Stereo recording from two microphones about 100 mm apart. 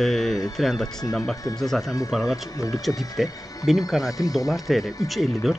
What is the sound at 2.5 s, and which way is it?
Speech, 35° left (ahead or behind).